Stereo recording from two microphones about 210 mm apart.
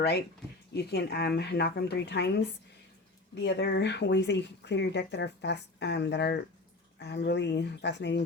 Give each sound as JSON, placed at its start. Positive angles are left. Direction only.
{"t": 0.7, "sound": "speech", "side_deg": 50}
{"t": 3.3, "sound": "speech", "side_deg": 55}